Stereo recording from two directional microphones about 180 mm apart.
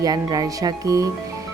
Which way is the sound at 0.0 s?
20° right (ahead or behind).